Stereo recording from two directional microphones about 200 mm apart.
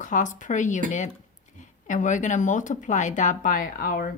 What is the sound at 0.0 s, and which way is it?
Speech, 40° left (ahead or behind).